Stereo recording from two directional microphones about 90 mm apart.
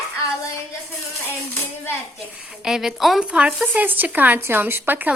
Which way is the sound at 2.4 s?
5° right (ahead or behind).